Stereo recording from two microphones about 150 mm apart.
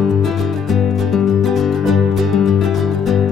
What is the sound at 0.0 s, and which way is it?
Music, centre (ahead or behind).